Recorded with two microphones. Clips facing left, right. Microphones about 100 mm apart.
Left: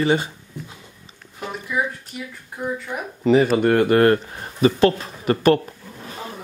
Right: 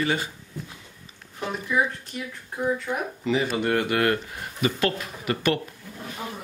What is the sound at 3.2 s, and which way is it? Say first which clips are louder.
Speech: left 11 dB; 45° left (ahead or behind).